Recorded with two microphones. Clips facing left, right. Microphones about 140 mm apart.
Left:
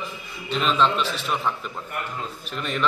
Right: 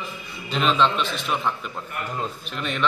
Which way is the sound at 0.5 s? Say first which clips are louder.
Right 1 dB; centre (ahead or behind).